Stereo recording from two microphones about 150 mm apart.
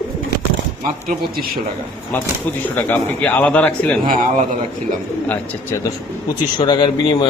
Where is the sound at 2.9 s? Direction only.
15° left (ahead or behind).